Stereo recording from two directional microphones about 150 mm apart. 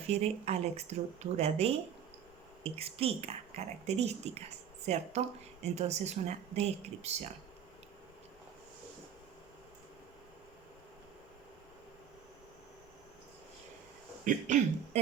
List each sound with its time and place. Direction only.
0.1 s a woman's voice: 45° right (ahead or behind)
14.3 s throat clearing: 55° right (ahead or behind)